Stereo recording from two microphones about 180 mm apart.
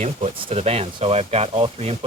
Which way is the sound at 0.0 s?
35° right (ahead or behind).